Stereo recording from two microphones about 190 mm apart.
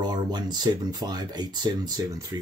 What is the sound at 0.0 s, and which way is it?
Speech, 20° right (ahead or behind).